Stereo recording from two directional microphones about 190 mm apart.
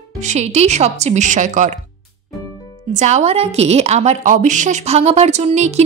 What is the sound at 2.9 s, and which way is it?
A woman's voice, 40° right (ahead or behind).